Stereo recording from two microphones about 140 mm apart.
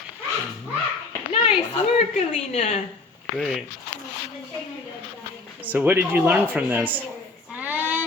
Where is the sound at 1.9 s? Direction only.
50° left (ahead or behind).